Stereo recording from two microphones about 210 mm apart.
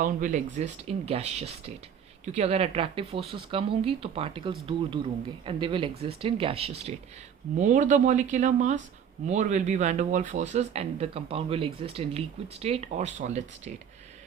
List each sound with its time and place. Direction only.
0.0 s speech: 40° right (ahead or behind)